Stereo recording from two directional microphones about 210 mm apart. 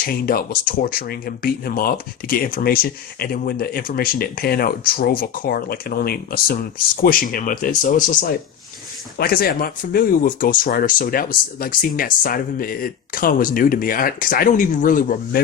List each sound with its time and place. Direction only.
0.0 s speech: 45° left (ahead or behind)